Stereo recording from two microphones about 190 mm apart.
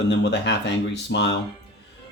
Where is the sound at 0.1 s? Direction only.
65° left (ahead or behind).